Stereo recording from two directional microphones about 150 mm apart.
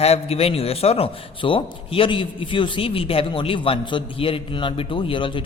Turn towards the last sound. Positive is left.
turn(degrees=35)  # may be behind; listen again after turning